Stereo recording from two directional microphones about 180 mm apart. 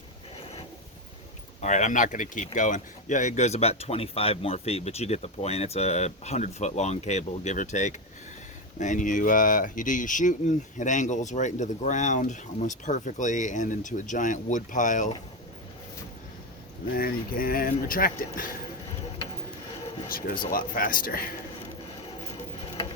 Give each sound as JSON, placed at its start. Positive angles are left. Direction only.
{"t": 1.6, "sound": "speech", "side_deg": 40}
{"t": 16.9, "sound": "speech", "side_deg": 55}
{"t": 20.1, "sound": "speech", "side_deg": 50}